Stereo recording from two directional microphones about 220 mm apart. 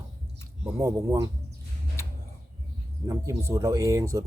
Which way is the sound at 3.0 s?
15° right (ahead or behind).